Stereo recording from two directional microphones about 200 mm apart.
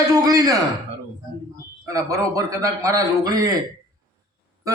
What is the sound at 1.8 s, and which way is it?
A man's voice, 15° right (ahead or behind).